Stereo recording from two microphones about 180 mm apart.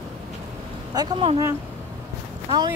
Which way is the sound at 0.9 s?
25° right (ahead or behind).